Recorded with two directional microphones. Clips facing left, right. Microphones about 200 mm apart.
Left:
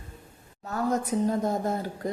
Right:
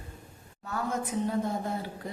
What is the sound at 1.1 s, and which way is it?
Speech, 40° left (ahead or behind).